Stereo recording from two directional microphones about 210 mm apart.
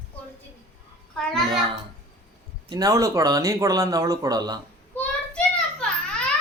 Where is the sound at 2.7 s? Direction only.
15° right (ahead or behind).